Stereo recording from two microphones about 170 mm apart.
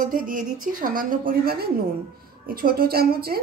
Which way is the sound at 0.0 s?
55° right (ahead or behind).